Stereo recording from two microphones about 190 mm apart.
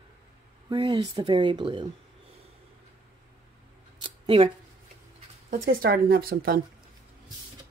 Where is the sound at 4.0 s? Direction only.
25° right (ahead or behind).